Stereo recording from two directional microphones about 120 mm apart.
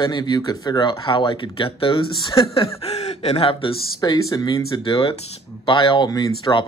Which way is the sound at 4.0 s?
35° left (ahead or behind).